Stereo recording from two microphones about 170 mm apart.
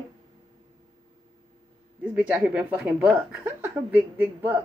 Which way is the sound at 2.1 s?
5° right (ahead or behind).